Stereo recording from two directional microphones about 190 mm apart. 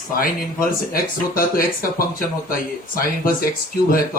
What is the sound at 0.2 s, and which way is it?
Speech, 50° left (ahead or behind).